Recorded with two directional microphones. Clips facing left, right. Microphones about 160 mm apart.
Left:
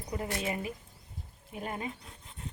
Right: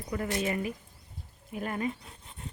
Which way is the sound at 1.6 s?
25° left (ahead or behind).